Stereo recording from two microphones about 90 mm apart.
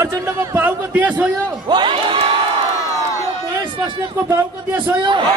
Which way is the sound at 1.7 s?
60° right (ahead or behind).